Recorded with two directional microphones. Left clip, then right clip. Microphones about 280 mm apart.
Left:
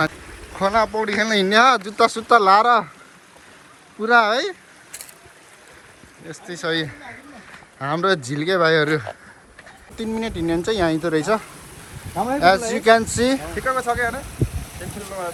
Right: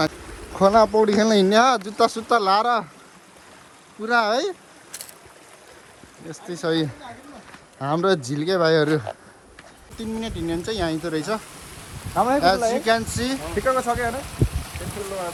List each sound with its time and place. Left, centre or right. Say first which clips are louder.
0.5 s speech: right 3 dB; right
4.0 s speech: left 4 dB; centre
6.5 s speech: even; centre
13.6 s speech: right 2 dB; right